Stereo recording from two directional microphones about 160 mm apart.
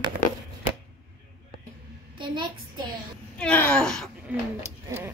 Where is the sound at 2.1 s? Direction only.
30° right (ahead or behind).